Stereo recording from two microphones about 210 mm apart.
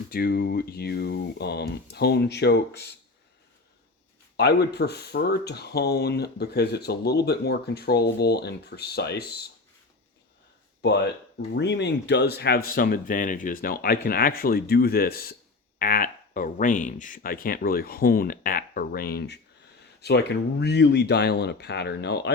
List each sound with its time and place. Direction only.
0.1 s speech: 45° left (ahead or behind)
4.4 s speech: 50° left (ahead or behind)
10.8 s speech: 55° left (ahead or behind)